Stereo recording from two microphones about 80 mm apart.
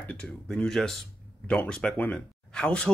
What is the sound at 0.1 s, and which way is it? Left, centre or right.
Speech, centre.